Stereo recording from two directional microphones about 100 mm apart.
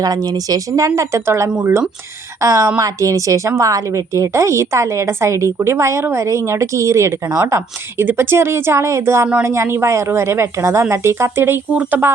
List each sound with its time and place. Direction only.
0.0 s a woman's voice: 40° right (ahead or behind); by 12.1 s 20° right (ahead or behind)